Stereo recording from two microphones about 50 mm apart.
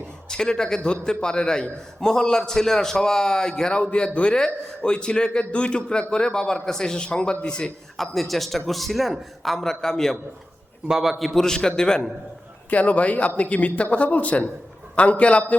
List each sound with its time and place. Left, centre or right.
0.3 s a man's voice: centre
7.9 s a man's voice: centre
10.8 s a man's voice: centre
11.3 s a man's voice: centre
12.7 s speech: left